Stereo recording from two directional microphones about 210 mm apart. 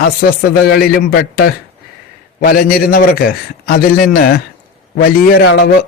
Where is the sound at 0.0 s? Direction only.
50° left (ahead or behind).